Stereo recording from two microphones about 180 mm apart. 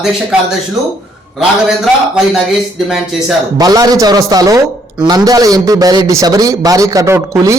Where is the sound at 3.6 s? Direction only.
20° right (ahead or behind).